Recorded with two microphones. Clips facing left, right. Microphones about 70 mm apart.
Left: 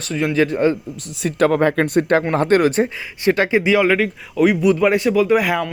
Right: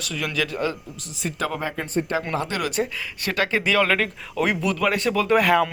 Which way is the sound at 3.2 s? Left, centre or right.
Left.